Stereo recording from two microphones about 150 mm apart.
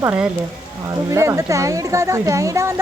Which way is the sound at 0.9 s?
20° right (ahead or behind).